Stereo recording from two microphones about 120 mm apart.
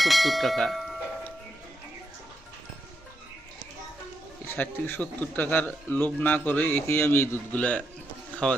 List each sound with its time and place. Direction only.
0.0 s speech: centre (ahead or behind)
4.4 s a man's voice: 15° left (ahead or behind)